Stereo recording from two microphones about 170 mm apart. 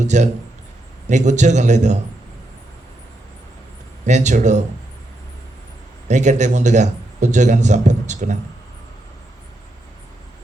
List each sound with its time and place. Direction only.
0.0 s a man's voice: 45° right (ahead or behind)
4.0 s speech: 45° right (ahead or behind)
6.1 s speech: 45° right (ahead or behind)